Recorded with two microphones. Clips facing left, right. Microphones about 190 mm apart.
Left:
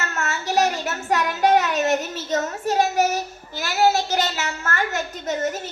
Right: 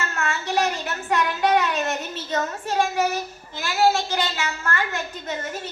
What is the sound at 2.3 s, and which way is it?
Speech, 40° left (ahead or behind).